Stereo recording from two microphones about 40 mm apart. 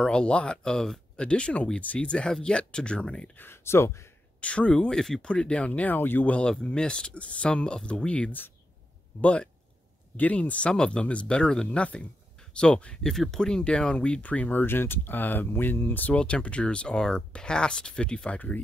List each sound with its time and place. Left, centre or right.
0.0 s speech: left
0.7 s speech: centre
1.2 s speech: left
2.0 s speech: left
3.3 s speech: left
4.4 s speech: left
5.7 s speech: left
5.9 s speech: left
6.6 s speech: left
10.1 s speech: left
10.7 s speech: left
13.0 s speech: centre; by 14.5 s left
14.5 s speech: left
16.1 s speech: left